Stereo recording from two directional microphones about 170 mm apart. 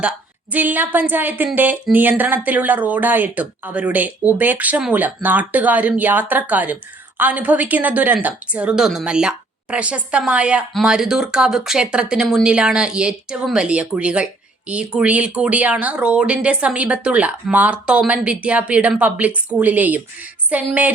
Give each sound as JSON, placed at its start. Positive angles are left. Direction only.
{"t": 0.5, "sound": "a woman's voice", "side_deg": -10}